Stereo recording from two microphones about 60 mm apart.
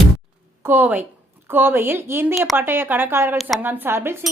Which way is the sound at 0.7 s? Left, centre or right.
Right.